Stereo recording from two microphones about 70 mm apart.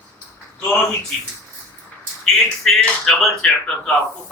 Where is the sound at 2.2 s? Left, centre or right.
Centre.